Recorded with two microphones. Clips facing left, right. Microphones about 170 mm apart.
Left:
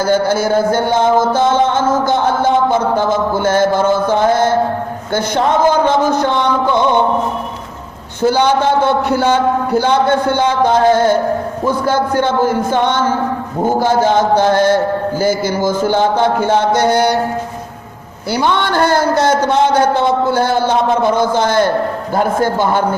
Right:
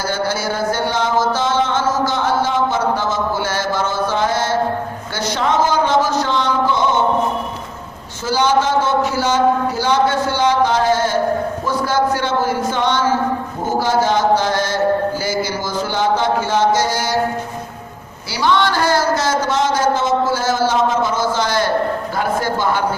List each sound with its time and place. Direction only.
0.0 s music: 50° left (ahead or behind)
8.2 s a man's voice: 60° left (ahead or behind)
18.3 s a man's voice: 55° left (ahead or behind)